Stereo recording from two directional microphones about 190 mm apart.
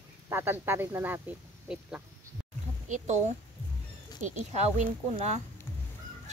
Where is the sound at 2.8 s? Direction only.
40° right (ahead or behind).